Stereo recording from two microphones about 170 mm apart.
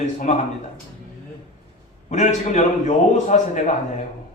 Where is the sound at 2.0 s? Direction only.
45° left (ahead or behind).